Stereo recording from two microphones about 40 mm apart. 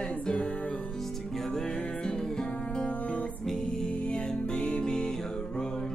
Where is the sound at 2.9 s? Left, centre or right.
Left.